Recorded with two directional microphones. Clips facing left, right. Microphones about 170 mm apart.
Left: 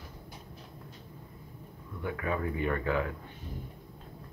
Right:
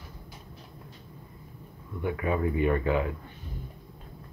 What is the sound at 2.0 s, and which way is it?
Speech, 20° right (ahead or behind).